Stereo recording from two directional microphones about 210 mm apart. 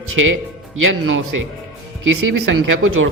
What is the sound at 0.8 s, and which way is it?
Speech, 70° right (ahead or behind).